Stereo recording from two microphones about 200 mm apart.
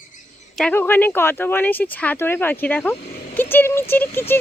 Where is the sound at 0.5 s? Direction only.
5° left (ahead or behind).